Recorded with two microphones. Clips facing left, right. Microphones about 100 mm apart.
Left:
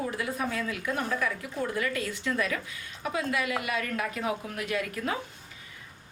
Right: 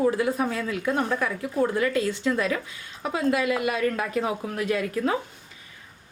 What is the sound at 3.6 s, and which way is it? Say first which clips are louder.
A woman's voice: right 6 dB; 35° right (ahead or behind).